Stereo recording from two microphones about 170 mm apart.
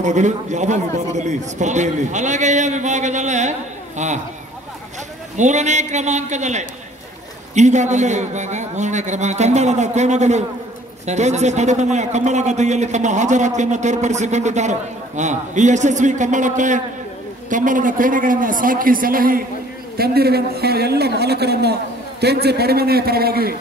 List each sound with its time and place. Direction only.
0.0 s a man's voice: 45° right (ahead or behind)
5.4 s a man's voice: 45° right (ahead or behind)
20.0 s a woman's voice: 65° right (ahead or behind)